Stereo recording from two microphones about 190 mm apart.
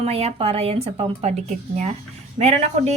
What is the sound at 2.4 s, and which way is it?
Speech, 35° right (ahead or behind).